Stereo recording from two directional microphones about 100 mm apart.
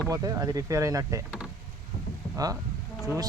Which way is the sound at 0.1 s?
35° right (ahead or behind).